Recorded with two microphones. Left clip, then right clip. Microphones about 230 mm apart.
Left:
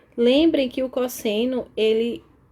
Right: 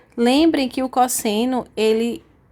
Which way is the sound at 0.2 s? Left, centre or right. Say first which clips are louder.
Right 1 dB; right.